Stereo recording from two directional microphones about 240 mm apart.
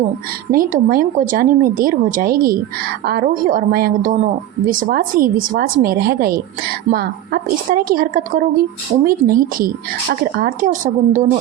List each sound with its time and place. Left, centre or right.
0.5 s a woman's voice: right